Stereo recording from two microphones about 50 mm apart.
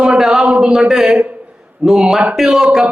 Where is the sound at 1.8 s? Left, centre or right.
Centre.